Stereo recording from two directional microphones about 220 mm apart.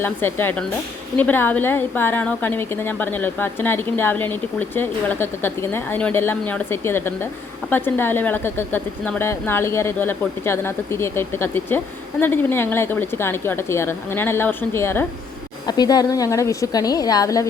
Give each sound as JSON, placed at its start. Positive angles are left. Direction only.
{"t": 0.0, "sound": "a woman's voice", "side_deg": 10}